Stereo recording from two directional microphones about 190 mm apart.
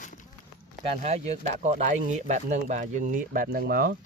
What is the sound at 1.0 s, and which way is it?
Speech, 35° right (ahead or behind).